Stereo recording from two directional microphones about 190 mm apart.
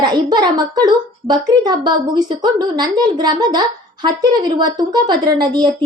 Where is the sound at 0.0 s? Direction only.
25° right (ahead or behind).